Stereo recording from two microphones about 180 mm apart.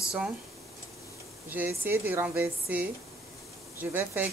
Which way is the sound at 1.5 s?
10° right (ahead or behind).